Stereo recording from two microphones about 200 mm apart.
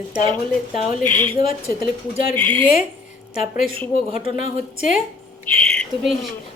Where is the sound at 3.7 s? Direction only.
30° right (ahead or behind).